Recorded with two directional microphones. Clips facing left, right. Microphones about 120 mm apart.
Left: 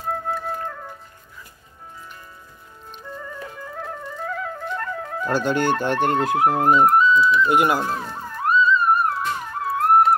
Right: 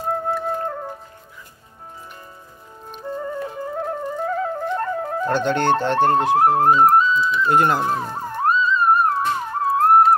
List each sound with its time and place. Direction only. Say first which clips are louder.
0.1 s music: right 3 dB; 35° right (ahead or behind)
3.0 s flute: right 8 dB; 35° right (ahead or behind)
5.3 s speech: right 1 dB; 10° left (ahead or behind)
6.0 s speech: right 3 dB; 35° right (ahead or behind)
7.4 s speech: right 1 dB; 15° left (ahead or behind)
7.8 s music: right 4 dB; 30° right (ahead or behind)